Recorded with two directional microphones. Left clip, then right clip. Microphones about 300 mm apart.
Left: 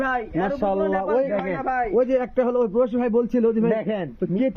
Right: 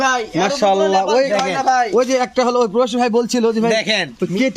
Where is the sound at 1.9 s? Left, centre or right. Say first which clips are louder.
Right 5 dB; right.